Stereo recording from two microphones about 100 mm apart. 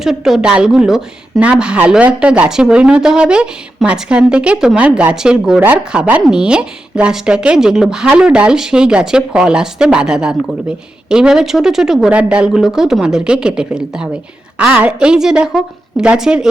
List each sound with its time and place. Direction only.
0.0 s a woman's voice: 5° right (ahead or behind)